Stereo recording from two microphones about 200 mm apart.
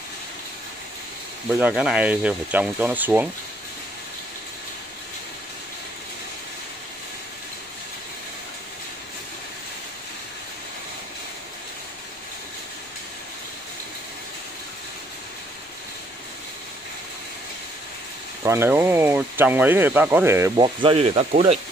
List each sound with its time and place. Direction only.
1.6 s speech: 5° right (ahead or behind)
18.4 s speech: 15° right (ahead or behind)
20.5 s speech: 25° right (ahead or behind)